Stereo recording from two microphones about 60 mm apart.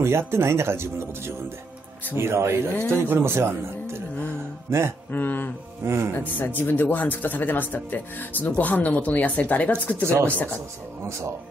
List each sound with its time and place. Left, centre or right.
0.0 s speech: right
5.1 s speech: left
5.9 s speech: right
6.1 s speech: left
11.1 s speech: right